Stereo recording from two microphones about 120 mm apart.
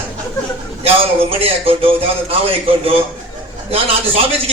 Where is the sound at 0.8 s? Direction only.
55° right (ahead or behind).